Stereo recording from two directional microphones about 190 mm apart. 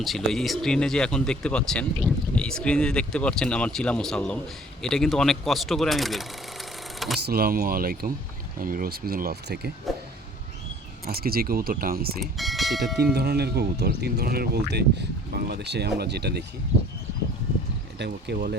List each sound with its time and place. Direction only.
0.0 s speech: centre (ahead or behind)
7.3 s speech: 50° right (ahead or behind)
11.0 s speech: 55° right (ahead or behind)
12.2 s speech: centre (ahead or behind)
13.1 s speech: 55° right (ahead or behind)
18.0 s speech: 60° right (ahead or behind)